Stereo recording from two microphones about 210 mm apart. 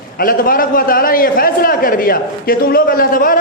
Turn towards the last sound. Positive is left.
turn(degrees=40)  # may be behind; listen again after turning